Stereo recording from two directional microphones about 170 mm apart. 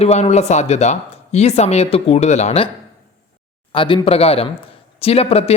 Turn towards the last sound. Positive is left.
turn(degrees=35)  # may be behind; listen again after turning